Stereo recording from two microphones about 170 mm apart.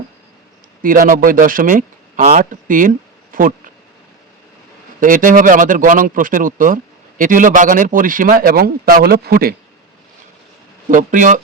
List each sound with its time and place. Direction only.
0.8 s a man's voice: 55° right (ahead or behind)
4.9 s a man's voice: 50° right (ahead or behind)
10.8 s a man's voice: 50° right (ahead or behind)